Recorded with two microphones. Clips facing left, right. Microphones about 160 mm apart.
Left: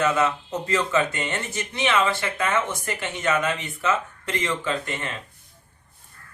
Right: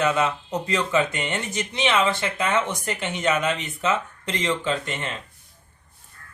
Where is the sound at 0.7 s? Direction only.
15° right (ahead or behind).